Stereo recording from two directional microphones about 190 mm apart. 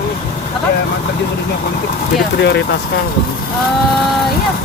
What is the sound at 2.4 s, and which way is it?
Speech, 60° left (ahead or behind).